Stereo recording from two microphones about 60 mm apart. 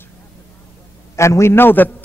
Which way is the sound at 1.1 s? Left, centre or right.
Left.